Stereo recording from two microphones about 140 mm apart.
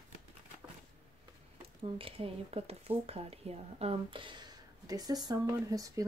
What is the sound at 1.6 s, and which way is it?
Speech, 45° right (ahead or behind).